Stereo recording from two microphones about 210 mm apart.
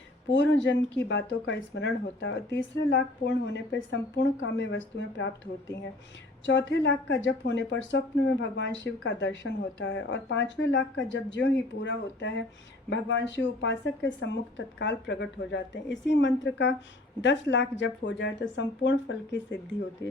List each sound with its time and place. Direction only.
0.3 s a woman's voice: 60° left (ahead or behind)
6.4 s a woman's voice: 60° left (ahead or behind)